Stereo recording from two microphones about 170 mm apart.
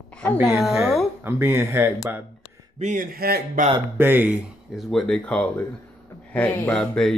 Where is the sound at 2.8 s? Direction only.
45° right (ahead or behind).